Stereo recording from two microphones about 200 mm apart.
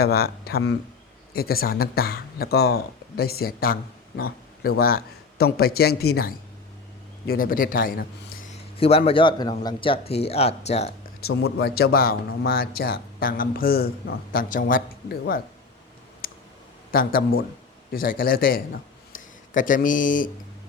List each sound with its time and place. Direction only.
0.0 s a man's voice: 50° left (ahead or behind)
4.8 s a man's voice: 50° left (ahead or behind)
8.8 s a man's voice: 30° left (ahead or behind)
11.6 s a man's voice: 50° left (ahead or behind)
16.9 s a man's voice: 45° left (ahead or behind)